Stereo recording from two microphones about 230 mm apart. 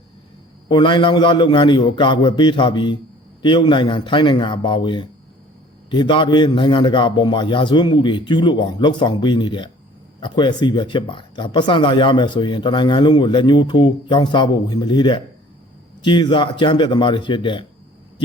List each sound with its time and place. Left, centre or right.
0.7 s speech: centre